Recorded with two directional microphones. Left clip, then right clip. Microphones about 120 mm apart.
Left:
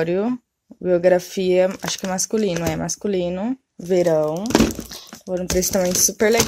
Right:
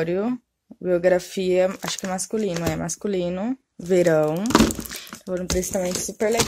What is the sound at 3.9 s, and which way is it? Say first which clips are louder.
Speech: left 1 dB; 15° right (ahead or behind).